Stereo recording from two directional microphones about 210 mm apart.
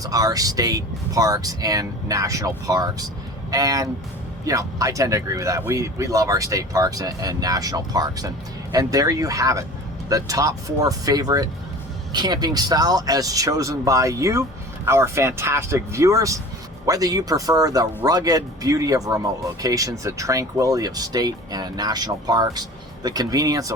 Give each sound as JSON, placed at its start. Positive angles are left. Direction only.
{"t": 0.0, "sound": "speech", "side_deg": -15}